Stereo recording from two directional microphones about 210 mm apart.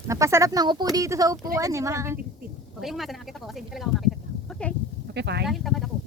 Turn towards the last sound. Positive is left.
turn(degrees=0)  # may be behind; listen again after turning